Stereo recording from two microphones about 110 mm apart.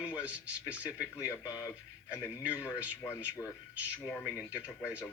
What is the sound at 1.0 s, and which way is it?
Speech, 30° left (ahead or behind).